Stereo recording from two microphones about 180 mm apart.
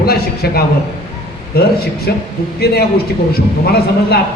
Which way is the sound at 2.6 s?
60° left (ahead or behind).